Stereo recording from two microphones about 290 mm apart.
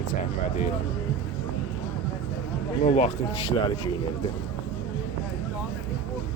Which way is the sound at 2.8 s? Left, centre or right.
Left.